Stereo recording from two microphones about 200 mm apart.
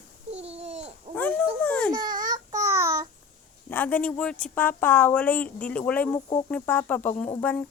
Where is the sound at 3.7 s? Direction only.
10° left (ahead or behind).